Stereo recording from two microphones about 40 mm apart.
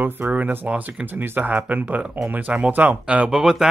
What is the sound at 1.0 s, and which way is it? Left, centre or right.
Speech, right.